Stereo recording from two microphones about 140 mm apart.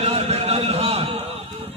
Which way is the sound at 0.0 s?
50° right (ahead or behind).